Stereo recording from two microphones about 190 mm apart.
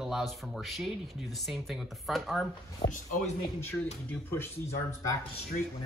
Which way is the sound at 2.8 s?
35° left (ahead or behind).